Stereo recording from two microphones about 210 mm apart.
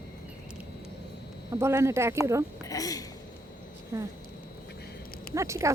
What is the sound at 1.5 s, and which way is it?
Speech, 10° right (ahead or behind).